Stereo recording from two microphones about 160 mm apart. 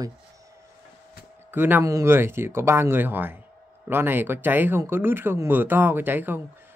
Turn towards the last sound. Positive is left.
turn(degrees=-10)  # may be behind; listen again after turning